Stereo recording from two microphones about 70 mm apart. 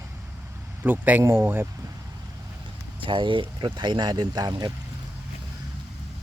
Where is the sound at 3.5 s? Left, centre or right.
Right.